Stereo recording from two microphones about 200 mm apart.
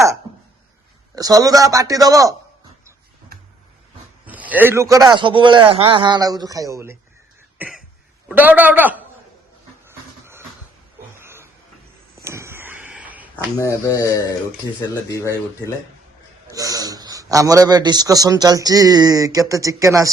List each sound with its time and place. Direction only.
1.1 s a man's voice: 20° right (ahead or behind)
4.3 s a man's voice: 10° right (ahead or behind)
8.3 s a man's voice: 10° right (ahead or behind)
11.2 s a sound: 10° right (ahead or behind)
13.6 s speech: 15° left (ahead or behind)
16.5 s a man's voice: 15° right (ahead or behind)